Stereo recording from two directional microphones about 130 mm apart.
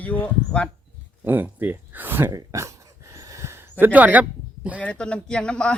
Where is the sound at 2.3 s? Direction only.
25° right (ahead or behind).